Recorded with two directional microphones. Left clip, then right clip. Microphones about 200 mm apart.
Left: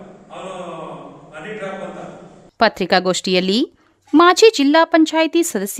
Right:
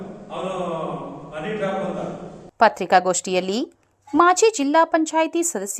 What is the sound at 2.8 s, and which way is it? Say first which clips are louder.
A woman's voice: left 1 dB; 50° left (ahead or behind).